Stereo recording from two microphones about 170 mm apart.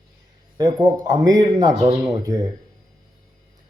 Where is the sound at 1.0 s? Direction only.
20° right (ahead or behind).